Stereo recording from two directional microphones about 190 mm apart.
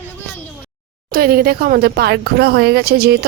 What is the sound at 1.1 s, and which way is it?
Speech, 50° right (ahead or behind).